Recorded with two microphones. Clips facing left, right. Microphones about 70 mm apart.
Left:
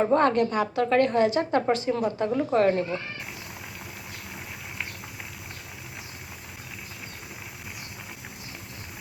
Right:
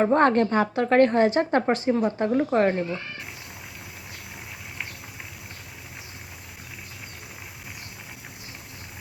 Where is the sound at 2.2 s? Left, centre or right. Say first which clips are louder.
Even; right.